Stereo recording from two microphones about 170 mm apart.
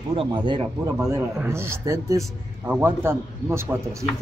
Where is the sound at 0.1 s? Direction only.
30° right (ahead or behind).